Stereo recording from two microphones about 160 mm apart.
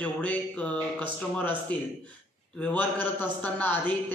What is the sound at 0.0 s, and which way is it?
A man's voice, 10° left (ahead or behind).